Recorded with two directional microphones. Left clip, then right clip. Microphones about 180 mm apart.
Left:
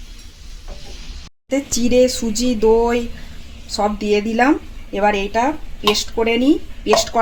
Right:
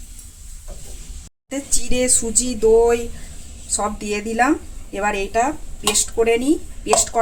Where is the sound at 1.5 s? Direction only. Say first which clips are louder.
Left 7 dB; 40° left (ahead or behind).